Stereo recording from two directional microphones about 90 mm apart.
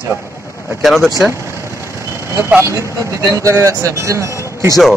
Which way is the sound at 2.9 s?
35° right (ahead or behind).